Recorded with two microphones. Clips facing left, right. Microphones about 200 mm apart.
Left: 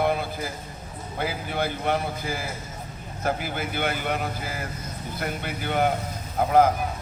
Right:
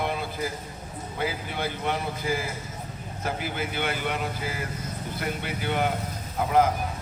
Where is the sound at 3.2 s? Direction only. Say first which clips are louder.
Left 3 dB; 50° left (ahead or behind).